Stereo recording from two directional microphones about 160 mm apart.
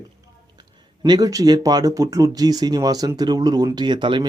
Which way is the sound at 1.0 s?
25° right (ahead or behind).